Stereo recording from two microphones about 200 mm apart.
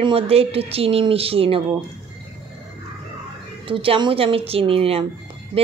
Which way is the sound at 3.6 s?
25° right (ahead or behind).